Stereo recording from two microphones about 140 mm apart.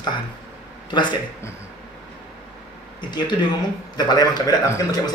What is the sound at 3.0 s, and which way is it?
A man's voice, 30° left (ahead or behind).